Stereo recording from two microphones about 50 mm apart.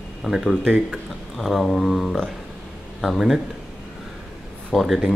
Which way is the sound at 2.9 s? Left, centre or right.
Centre.